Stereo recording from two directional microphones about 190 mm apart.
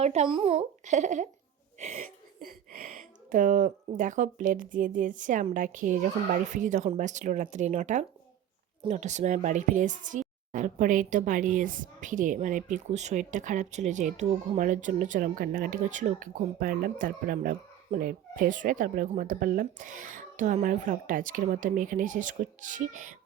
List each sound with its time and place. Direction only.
0.0 s a woman's voice: 35° right (ahead or behind)